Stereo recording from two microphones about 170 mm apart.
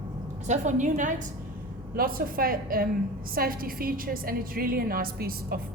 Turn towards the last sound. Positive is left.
turn(degrees=-60)  # may be behind; listen again after turning